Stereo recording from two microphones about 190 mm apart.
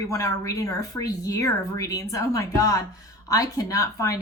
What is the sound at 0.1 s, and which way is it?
A woman's voice, 15° left (ahead or behind).